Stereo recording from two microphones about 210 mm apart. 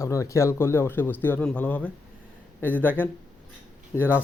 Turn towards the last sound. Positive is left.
turn(degrees=10)  # may be behind; listen again after turning